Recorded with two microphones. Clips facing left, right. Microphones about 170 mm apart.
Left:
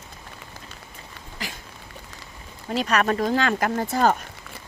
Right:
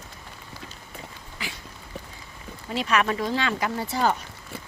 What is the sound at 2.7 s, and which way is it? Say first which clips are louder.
Speech: left 2 dB; 40° left (ahead or behind).